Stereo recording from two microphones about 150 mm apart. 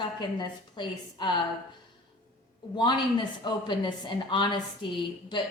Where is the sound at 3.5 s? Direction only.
30° left (ahead or behind).